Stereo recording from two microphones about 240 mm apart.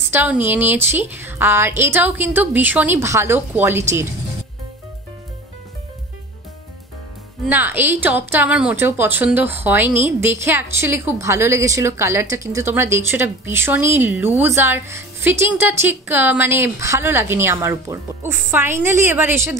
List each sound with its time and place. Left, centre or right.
0.1 s a woman's voice: centre
7.4 s a woman's voice: centre